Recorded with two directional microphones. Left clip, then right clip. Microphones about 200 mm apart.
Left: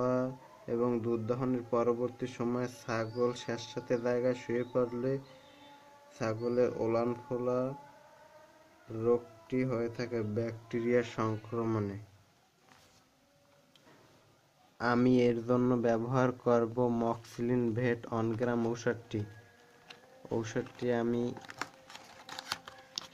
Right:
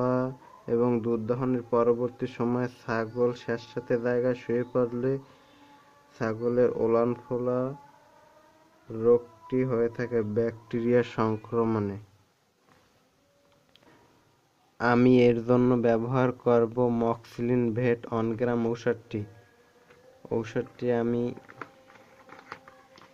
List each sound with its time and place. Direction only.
0.0 s speech: 25° right (ahead or behind)
8.9 s speech: 20° right (ahead or behind)
14.8 s speech: 10° right (ahead or behind)
20.2 s speech: 5° right (ahead or behind)
21.4 s a sound: 25° left (ahead or behind)